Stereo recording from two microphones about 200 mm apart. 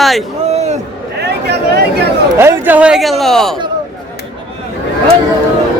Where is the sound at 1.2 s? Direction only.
55° right (ahead or behind).